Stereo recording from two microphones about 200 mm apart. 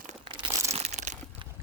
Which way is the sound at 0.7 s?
35° right (ahead or behind).